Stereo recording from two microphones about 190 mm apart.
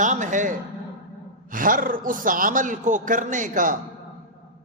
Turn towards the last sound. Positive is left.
turn(degrees=-45)  # may be behind; listen again after turning